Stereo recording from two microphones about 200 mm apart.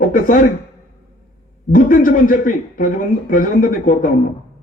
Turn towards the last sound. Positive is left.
turn(degrees=45)  # may be behind; listen again after turning